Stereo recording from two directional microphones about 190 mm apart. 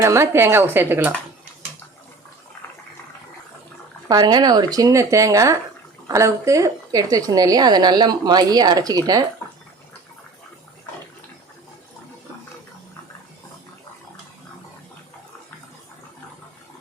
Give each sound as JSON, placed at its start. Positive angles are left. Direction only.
{"t": 0.0, "sound": "speech", "side_deg": -15}
{"t": 4.1, "sound": "a woman's voice", "side_deg": -20}